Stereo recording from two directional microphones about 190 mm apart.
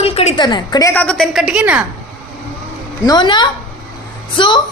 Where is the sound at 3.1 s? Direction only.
25° left (ahead or behind).